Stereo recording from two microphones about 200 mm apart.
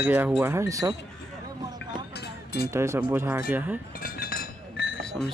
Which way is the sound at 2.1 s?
50° left (ahead or behind).